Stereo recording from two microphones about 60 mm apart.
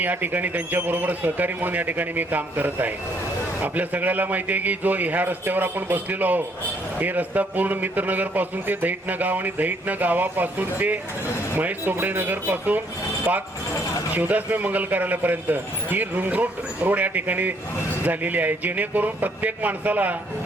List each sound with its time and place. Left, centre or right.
0.0 s a man's voice: right
14.1 s a man's voice: right